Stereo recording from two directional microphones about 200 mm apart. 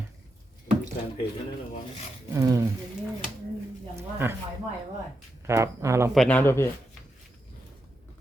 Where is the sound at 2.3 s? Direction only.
15° right (ahead or behind).